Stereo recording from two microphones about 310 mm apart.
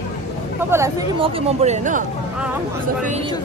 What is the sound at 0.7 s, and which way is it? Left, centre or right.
Speech, centre.